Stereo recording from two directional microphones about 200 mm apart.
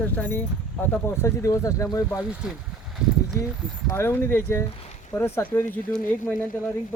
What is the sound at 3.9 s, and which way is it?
Speech, 10° left (ahead or behind).